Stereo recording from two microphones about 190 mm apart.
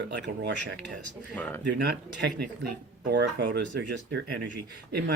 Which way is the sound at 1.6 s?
60° right (ahead or behind).